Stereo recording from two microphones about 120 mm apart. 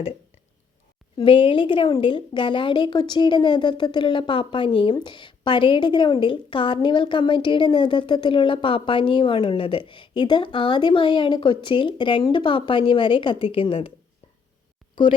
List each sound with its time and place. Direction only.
1.1 s a woman's voice: 45° left (ahead or behind)